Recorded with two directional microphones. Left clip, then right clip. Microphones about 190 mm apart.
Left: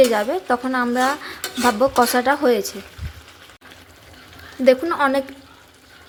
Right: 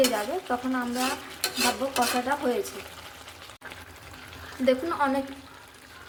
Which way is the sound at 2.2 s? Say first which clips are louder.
Left 10 dB; 40° left (ahead or behind).